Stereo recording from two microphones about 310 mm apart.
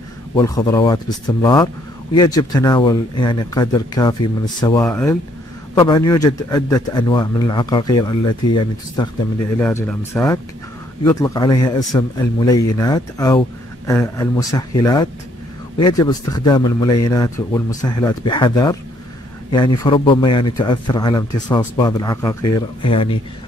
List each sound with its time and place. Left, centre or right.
0.4 s a man's voice: centre